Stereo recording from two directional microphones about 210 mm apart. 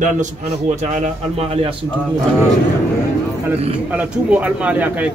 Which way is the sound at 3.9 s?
5° right (ahead or behind).